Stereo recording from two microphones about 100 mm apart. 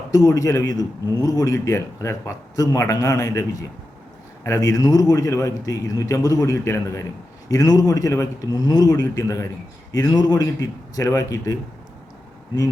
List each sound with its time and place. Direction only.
0.1 s a man's voice: 35° left (ahead or behind)